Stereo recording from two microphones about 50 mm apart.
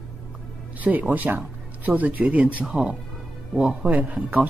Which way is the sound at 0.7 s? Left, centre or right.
Right.